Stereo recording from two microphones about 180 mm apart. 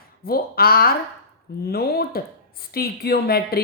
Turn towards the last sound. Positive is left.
turn(degrees=60)  # may be behind; listen again after turning